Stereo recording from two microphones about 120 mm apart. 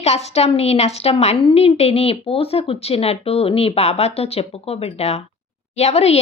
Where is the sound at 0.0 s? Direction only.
65° left (ahead or behind).